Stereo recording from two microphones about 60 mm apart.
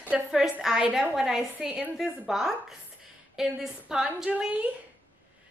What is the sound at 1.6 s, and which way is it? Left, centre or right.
Speech, right.